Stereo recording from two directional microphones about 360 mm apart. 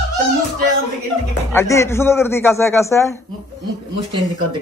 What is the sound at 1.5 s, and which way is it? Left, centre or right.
Mantra, centre.